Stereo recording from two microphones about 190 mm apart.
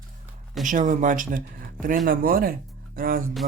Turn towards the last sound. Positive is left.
turn(degrees=-50)  # may be behind; listen again after turning